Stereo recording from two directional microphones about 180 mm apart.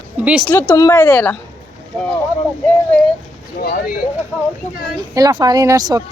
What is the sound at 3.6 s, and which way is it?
Speech, 55° left (ahead or behind).